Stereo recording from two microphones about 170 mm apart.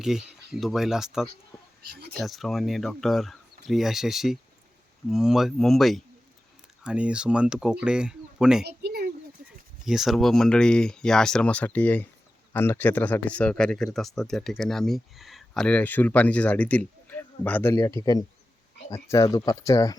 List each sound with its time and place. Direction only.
0.0 s speech: 5° right (ahead or behind)
1.8 s speech: 70° right (ahead or behind)
2.1 s speech: centre (ahead or behind)
8.6 s a sound: 70° right (ahead or behind)
9.8 s speech: centre (ahead or behind); by 20.0 s 20° left (ahead or behind)